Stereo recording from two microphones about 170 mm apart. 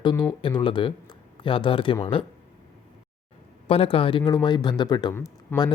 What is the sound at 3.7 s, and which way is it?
Speech, 35° left (ahead or behind).